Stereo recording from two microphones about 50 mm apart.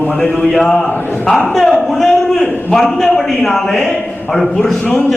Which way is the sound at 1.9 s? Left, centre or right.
Centre.